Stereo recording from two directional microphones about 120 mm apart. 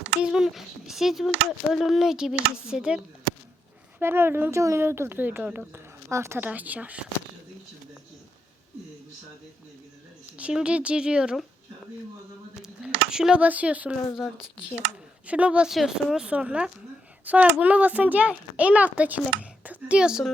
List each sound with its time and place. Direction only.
0.2 s a child's voice: 5° right (ahead or behind)
4.0 s a child's voice: 20° right (ahead or behind)
10.3 s a child's voice: 10° right (ahead or behind)
12.6 s speech: 5° right (ahead or behind)
15.3 s a child's voice: 10° right (ahead or behind)